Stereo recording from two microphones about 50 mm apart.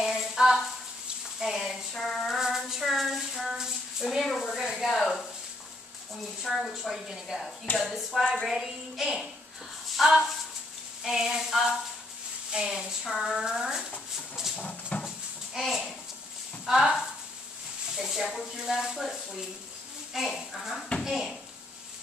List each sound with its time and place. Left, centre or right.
0.0 s a sound: centre
1.4 s a woman's voice: centre
2.2 s a sound: centre
4.2 s a woman's voice: centre
6.4 s a woman's voice: centre
8.5 s a woman's voice: centre
11.1 s speech: centre
12.5 s speech: centre
14.3 s dog: centre
14.7 s dog: centre
15.0 s goat: centre
16.6 s speech: centre
20.2 s a woman's voice: centre